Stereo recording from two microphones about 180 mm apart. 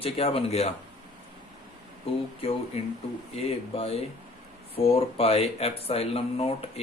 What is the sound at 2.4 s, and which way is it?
Speech, 35° left (ahead or behind).